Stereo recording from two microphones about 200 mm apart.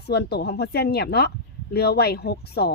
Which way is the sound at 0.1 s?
55° left (ahead or behind).